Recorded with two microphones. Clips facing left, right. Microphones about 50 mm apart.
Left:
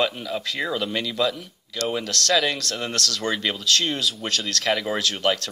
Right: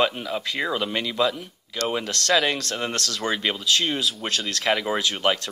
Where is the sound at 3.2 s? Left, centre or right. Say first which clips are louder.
Right 1 dB; centre.